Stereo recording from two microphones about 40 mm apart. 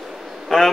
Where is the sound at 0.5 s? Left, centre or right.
Centre.